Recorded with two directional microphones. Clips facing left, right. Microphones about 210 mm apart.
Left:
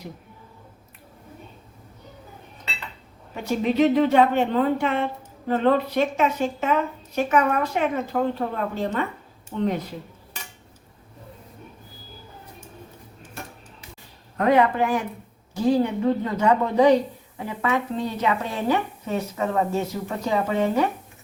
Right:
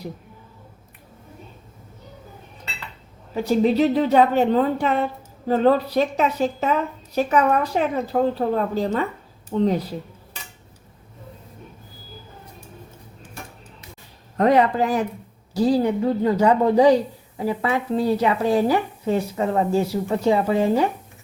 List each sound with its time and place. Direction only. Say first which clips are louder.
3.4 s speech: right 2 dB; 35° right (ahead or behind)
14.3 s speech: right 2 dB; 40° right (ahead or behind)